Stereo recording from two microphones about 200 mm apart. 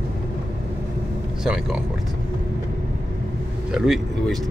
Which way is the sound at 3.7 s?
Centre (ahead or behind).